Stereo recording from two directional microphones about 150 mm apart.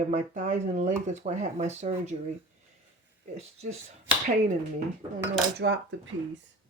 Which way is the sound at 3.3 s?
45° right (ahead or behind).